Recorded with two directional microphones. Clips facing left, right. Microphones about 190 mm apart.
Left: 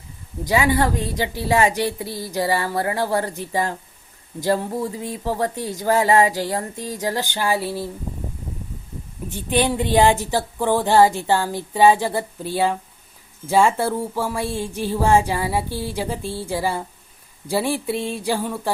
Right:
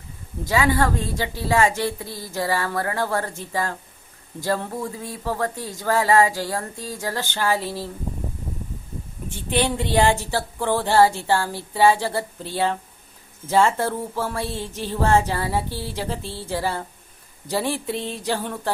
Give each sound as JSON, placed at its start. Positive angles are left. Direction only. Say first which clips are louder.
{"t": 0.4, "sound": "speech", "louder": "left 2 dB", "side_deg": 20}
{"t": 9.3, "sound": "speech", "louder": "left 2 dB", "side_deg": 15}